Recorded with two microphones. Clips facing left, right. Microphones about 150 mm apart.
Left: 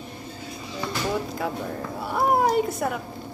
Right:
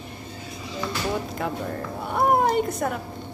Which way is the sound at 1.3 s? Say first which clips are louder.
Even; centre (ahead or behind).